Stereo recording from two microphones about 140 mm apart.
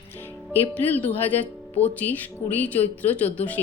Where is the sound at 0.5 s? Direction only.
15° left (ahead or behind).